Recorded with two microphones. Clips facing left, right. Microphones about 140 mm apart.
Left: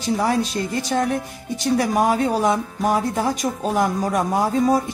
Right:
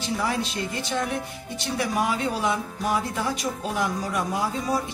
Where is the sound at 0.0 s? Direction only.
40° left (ahead or behind).